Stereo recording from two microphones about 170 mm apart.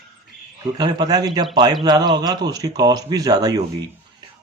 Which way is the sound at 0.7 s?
25° right (ahead or behind).